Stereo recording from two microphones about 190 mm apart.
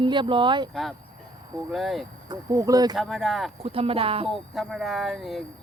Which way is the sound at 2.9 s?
Centre (ahead or behind).